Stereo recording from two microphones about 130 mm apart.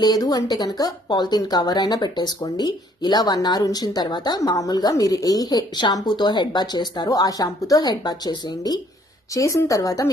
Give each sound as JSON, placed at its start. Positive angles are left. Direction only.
{"t": 0.0, "sound": "a woman's voice", "side_deg": 30}